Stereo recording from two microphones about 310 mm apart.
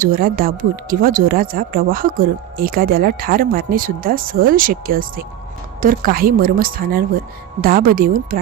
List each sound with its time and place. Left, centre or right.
0.0 s speech: right